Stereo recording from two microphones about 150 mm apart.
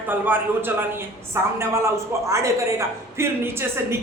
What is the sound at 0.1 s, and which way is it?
A man's voice, 15° right (ahead or behind).